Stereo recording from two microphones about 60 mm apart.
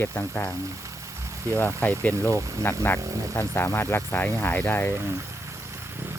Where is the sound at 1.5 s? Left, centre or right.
Left.